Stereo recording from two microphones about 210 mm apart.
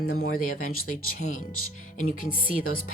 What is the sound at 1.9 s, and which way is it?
Speech, 40° left (ahead or behind).